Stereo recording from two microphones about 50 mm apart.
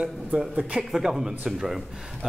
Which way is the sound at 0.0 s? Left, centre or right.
Centre.